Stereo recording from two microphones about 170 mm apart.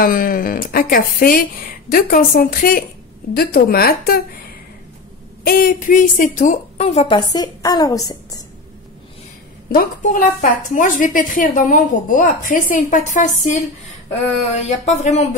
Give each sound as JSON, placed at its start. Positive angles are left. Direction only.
{"t": 0.0, "sound": "a woman's voice", "side_deg": 55}
{"t": 5.4, "sound": "a woman's voice", "side_deg": 60}
{"t": 7.2, "sound": "a woman's voice", "side_deg": 25}
{"t": 9.7, "sound": "a woman's voice", "side_deg": 50}
{"t": 14.5, "sound": "a sound", "side_deg": 40}